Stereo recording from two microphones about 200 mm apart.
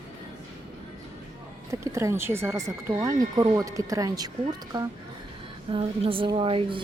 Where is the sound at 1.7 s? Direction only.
15° right (ahead or behind).